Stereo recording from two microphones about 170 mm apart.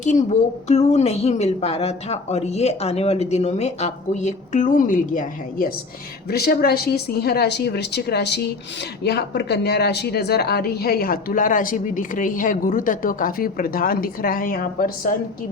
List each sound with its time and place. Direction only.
0.0 s a woman's voice: 45° left (ahead or behind)
6.2 s a woman's voice: 65° left (ahead or behind)